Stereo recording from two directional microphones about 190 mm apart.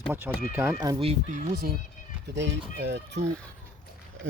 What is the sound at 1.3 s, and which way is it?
Speech, 50° right (ahead or behind).